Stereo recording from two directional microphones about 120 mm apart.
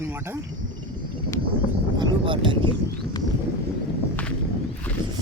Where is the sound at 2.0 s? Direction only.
45° right (ahead or behind).